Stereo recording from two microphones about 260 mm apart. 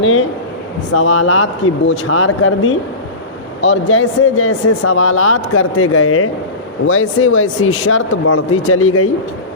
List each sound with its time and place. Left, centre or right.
0.0 s speech: left